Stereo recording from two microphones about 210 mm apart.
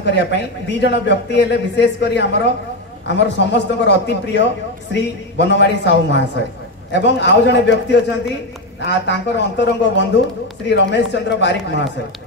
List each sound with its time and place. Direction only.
0.0 s a man's voice: 55° left (ahead or behind)